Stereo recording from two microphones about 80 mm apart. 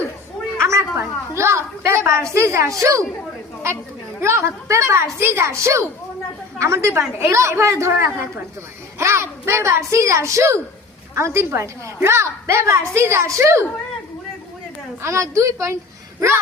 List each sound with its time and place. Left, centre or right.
0.6 s a sound: right
1.4 s a woman's voice: right
4.2 s speech: right
15.0 s speech: right